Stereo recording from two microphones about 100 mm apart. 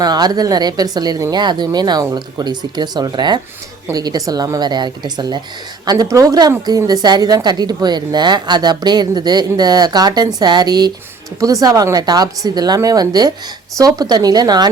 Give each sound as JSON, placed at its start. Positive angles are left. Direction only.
{"t": 0.0, "sound": "a woman's voice", "side_deg": -40}